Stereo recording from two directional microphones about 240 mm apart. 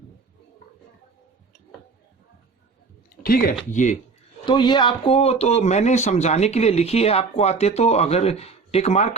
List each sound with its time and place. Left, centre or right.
3.2 s speech: left
4.4 s speech: centre